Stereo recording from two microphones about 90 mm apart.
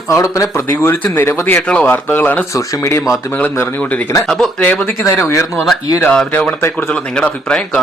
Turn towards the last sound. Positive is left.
turn(degrees=10)  # may be behind; listen again after turning